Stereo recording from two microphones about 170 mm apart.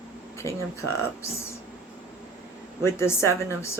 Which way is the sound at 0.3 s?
15° left (ahead or behind).